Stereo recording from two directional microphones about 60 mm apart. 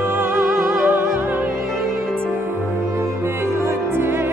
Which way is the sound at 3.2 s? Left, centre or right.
Right.